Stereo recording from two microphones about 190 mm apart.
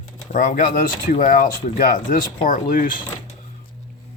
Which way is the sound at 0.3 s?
45° left (ahead or behind).